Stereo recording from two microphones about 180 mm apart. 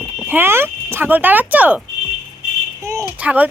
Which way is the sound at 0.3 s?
10° right (ahead or behind).